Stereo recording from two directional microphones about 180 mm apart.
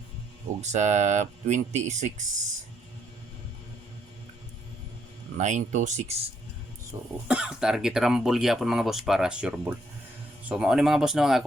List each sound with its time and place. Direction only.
0.6 s speech: 40° right (ahead or behind)
5.4 s speech: 40° right (ahead or behind)
6.9 s speech: 20° right (ahead or behind)
7.3 s speech: 5° right (ahead or behind)